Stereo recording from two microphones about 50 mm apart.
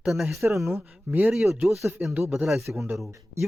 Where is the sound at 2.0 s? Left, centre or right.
Right.